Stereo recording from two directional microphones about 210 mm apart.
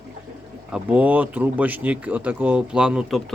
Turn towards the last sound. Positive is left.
turn(degrees=-5)  # may be behind; listen again after turning